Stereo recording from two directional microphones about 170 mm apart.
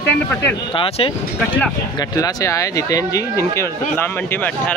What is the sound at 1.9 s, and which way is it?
Speech, 20° left (ahead or behind).